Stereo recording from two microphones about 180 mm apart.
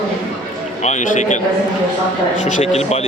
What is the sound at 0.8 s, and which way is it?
Speech, 45° left (ahead or behind).